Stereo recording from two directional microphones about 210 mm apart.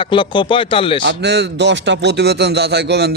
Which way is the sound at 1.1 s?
55° right (ahead or behind).